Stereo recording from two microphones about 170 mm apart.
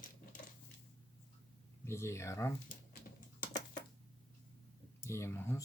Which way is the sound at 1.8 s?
15° left (ahead or behind).